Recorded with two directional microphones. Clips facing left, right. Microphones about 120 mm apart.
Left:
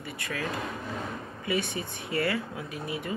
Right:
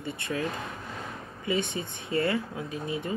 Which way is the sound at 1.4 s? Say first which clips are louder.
Right 1 dB; 20° right (ahead or behind).